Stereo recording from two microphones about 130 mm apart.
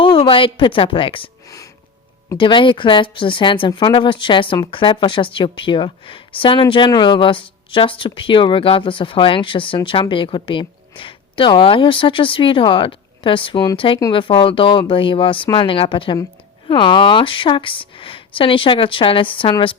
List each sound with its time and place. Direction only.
0.0 s a woman's voice: 40° left (ahead or behind)
1.5 s a sound: 25° left (ahead or behind)
2.4 s speech: 40° left (ahead or behind)